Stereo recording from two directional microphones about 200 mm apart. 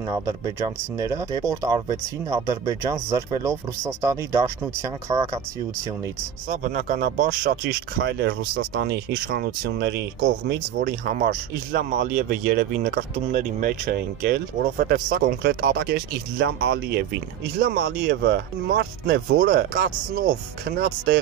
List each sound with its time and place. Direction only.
0.1 s speech: 15° right (ahead or behind)
6.5 s speech: 40° right (ahead or behind)
8.0 s speech: 55° right (ahead or behind)
19.3 s speech: 45° right (ahead or behind)